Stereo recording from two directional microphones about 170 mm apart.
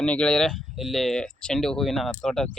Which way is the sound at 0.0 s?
5° left (ahead or behind).